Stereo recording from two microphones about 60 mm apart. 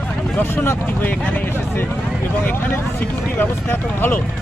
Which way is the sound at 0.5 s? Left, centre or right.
Left.